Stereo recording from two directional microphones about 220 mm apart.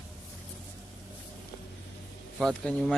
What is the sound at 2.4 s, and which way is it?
Speech, centre (ahead or behind).